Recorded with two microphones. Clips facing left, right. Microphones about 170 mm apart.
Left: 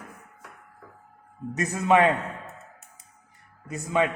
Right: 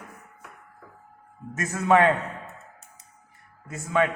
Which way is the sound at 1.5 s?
15° left (ahead or behind).